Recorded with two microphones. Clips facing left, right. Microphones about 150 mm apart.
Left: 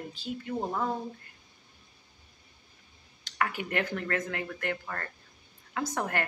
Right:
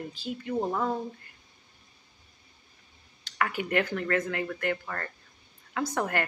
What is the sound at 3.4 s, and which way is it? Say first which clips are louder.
A woman's voice: right 3 dB; 30° left (ahead or behind).